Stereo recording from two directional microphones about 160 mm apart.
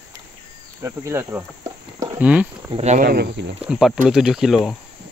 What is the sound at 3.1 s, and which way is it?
Speech, 85° right.